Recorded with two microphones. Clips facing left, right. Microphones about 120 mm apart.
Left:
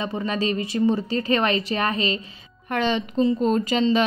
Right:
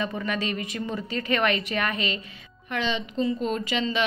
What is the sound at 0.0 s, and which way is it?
A woman's voice, 30° left (ahead or behind).